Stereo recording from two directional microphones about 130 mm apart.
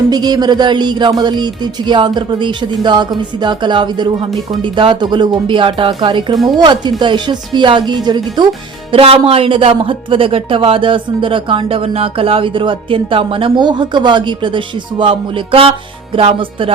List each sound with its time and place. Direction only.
0.1 s speech: 30° right (ahead or behind)
8.9 s speech: 45° right (ahead or behind)